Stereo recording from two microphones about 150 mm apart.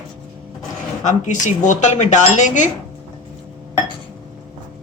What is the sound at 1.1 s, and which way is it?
A woman's voice, 55° left (ahead or behind).